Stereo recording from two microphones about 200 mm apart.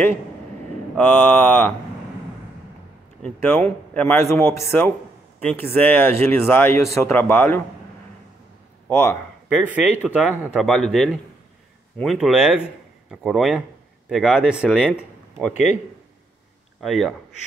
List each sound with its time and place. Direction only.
0.9 s a man's voice: 10° left (ahead or behind)
3.2 s a man's voice: 10° left (ahead or behind)
8.8 s a sound: 5° left (ahead or behind)
9.7 s speech: 10° right (ahead or behind)
15.5 s speech: 35° left (ahead or behind)
16.8 s speech: centre (ahead or behind)